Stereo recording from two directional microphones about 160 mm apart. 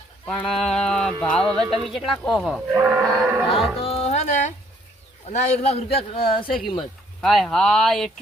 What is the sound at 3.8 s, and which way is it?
A man's voice, 40° left (ahead or behind).